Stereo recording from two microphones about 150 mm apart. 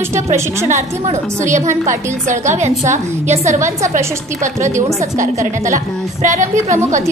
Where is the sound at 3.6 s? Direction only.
20° right (ahead or behind).